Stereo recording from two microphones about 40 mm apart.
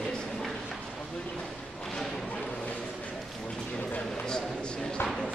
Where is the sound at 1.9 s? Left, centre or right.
Centre.